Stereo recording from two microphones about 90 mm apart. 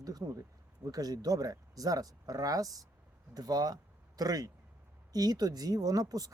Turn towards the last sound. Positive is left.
turn(degrees=-45)  # may be behind; listen again after turning